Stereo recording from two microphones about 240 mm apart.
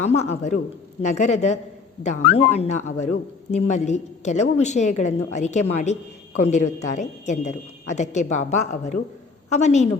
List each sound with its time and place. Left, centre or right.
0.0 s a woman's voice: left